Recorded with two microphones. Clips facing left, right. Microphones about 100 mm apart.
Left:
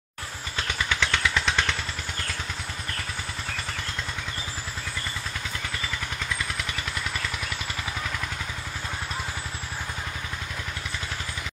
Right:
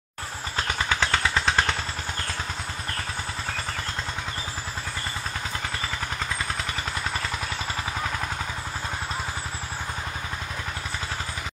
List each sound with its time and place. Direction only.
0.6 s vehicle: 40° right (ahead or behind)